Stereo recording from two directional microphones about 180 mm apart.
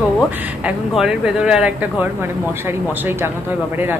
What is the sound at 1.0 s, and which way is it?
Speech, 5° right (ahead or behind).